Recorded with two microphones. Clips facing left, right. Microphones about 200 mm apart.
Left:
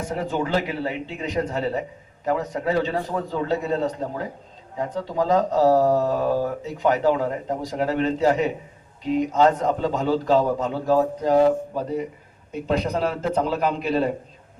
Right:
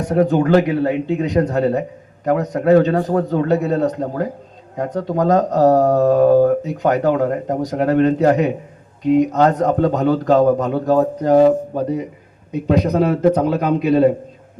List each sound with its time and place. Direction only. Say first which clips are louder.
0.0 s speech: right 10 dB; 60° right (ahead or behind)